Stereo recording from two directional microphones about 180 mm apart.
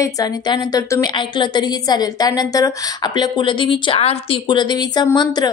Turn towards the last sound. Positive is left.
turn(degrees=20)  # may be behind; listen again after turning